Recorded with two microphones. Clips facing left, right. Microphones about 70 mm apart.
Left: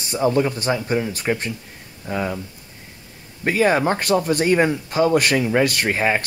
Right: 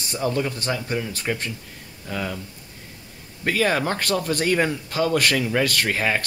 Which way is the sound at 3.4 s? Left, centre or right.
Left.